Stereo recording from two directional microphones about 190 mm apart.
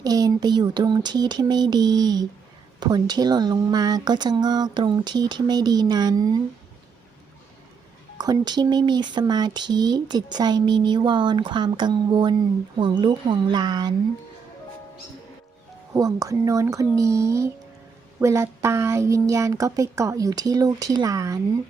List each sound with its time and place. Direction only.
0.0 s speech: 20° right (ahead or behind)
8.2 s speech: 20° right (ahead or behind)
16.0 s speech: 20° right (ahead or behind)